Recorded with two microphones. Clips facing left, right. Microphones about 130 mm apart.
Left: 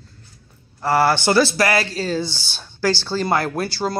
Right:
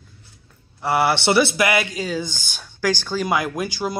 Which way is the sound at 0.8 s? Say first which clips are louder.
Left 2 dB; 20° right (ahead or behind).